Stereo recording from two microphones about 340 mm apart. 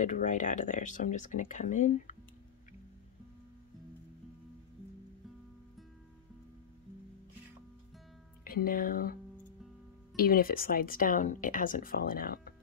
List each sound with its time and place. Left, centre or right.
0.0 s speech: left
8.5 s speech: left